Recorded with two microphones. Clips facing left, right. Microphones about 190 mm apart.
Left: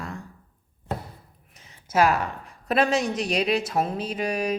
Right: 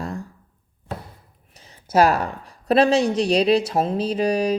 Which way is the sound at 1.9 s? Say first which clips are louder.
Right 4 dB; 35° right (ahead or behind).